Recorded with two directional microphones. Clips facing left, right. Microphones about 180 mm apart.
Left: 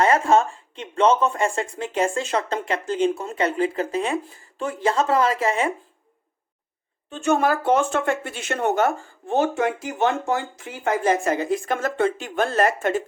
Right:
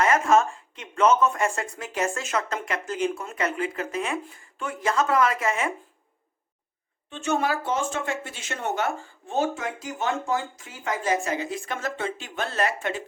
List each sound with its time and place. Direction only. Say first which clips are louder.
0.0 s speech: left 2 dB; 30° left (ahead or behind)
7.1 s speech: left 5 dB; 50° left (ahead or behind)